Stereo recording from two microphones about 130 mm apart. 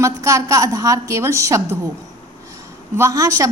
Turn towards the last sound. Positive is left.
turn(degrees=-25)  # may be behind; listen again after turning